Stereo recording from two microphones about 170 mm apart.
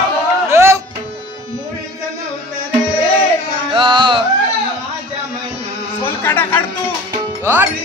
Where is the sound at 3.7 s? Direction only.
30° right (ahead or behind).